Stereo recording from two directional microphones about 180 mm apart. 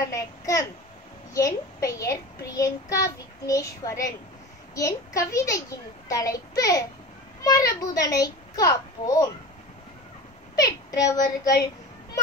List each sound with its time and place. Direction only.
0.0 s a sound: 15° left (ahead or behind)
1.3 s a child's voice: 15° left (ahead or behind)
10.5 s a child's voice: 20° left (ahead or behind)